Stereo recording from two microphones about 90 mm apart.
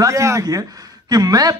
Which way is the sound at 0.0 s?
35° right (ahead or behind).